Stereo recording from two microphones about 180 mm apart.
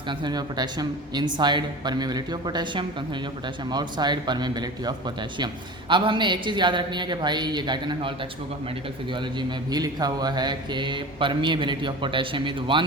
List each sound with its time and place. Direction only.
0.1 s speech: 25° right (ahead or behind)